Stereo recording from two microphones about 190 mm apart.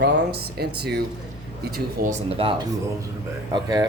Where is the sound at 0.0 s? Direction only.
55° right (ahead or behind).